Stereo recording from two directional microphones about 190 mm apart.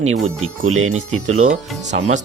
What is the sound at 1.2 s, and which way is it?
Speech, 40° right (ahead or behind).